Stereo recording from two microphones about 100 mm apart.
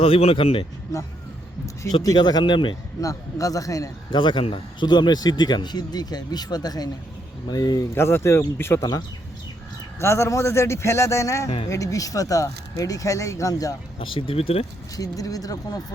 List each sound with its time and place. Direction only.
0.0 s speech: 80° left
2.0 s a man's voice: 40° left (ahead or behind)
3.0 s speech: 35° left (ahead or behind)
4.1 s a man's voice: 55° left (ahead or behind)
7.9 s a man's voice: 25° left (ahead or behind)
8.8 s speech: 40° left (ahead or behind)
10.0 s a man's voice: 25° left (ahead or behind)
11.4 s speech: 90° left
11.7 s speech: 35° left (ahead or behind)
14.0 s speech: 60° left (ahead or behind); by 14.7 s 80° left
14.9 s speech: 35° left (ahead or behind)